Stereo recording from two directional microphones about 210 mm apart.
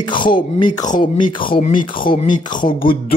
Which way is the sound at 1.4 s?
40° left (ahead or behind).